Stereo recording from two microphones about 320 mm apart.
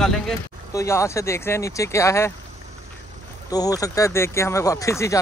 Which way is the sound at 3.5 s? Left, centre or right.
Centre.